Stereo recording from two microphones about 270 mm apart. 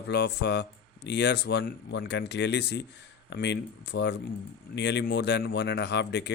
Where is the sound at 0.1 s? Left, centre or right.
Left.